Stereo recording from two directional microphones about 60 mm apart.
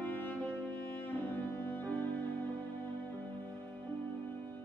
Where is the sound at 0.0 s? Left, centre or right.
Left.